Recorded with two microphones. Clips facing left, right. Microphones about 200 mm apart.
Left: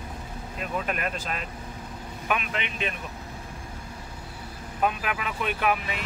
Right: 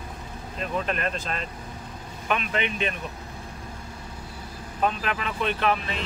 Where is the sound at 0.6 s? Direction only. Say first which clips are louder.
Right 2 dB; 10° left (ahead or behind).